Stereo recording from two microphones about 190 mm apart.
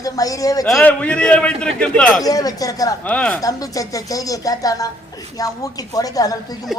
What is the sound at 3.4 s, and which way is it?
A woman's voice, 20° left (ahead or behind).